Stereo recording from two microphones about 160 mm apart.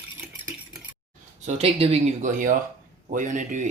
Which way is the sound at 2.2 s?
55° right (ahead or behind).